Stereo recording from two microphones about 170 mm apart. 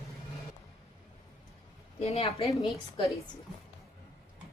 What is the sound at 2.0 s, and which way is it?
Speech, 35° left (ahead or behind).